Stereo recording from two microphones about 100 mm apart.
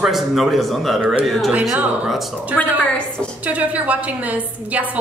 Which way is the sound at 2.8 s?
10° left (ahead or behind).